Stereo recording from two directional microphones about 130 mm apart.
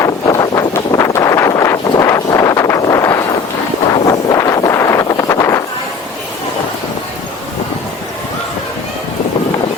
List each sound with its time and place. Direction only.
0.0 s wind noise: 25° left (ahead or behind)